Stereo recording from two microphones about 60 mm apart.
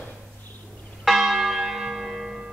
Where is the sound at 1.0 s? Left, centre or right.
Centre.